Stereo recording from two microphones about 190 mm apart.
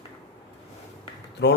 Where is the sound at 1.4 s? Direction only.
65° left (ahead or behind).